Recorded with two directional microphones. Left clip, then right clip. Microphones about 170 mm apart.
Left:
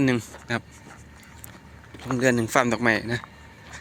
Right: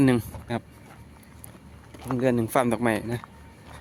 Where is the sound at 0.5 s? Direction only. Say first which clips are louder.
Left 3 dB; 10° right (ahead or behind).